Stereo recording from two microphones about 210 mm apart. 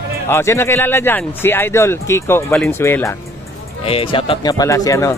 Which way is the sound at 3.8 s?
25° left (ahead or behind).